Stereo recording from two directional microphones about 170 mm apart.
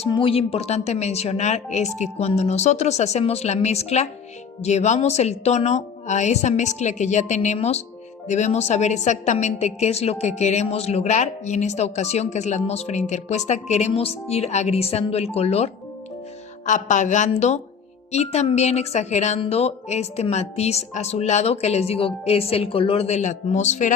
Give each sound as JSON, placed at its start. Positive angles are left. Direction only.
{"t": 0.0, "sound": "a woman's voice", "side_deg": 30}